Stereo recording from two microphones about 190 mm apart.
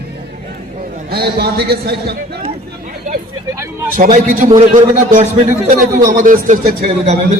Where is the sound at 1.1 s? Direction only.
55° right (ahead or behind).